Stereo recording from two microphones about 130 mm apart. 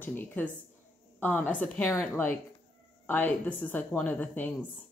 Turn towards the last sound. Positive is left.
turn(degrees=15)  # may be behind; listen again after turning